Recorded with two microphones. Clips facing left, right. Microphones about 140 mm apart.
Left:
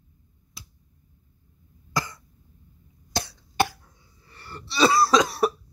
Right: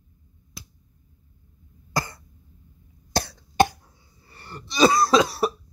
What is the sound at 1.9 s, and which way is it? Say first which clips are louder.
Cough: right 1 dB; 35° right (ahead or behind).